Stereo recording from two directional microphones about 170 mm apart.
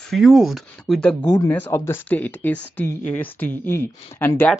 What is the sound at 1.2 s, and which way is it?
Speech, 20° left (ahead or behind).